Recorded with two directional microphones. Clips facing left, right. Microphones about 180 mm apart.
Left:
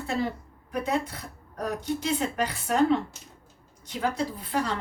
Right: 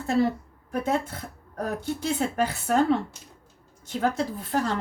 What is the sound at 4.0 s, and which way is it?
Speech, 45° right (ahead or behind).